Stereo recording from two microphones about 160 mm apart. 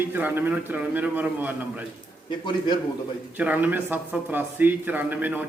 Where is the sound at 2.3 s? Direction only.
30° left (ahead or behind).